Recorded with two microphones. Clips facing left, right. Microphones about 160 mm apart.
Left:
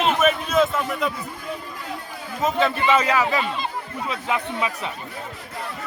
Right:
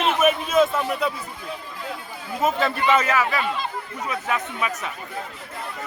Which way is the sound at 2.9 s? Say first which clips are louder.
Left 1 dB; 15° left (ahead or behind).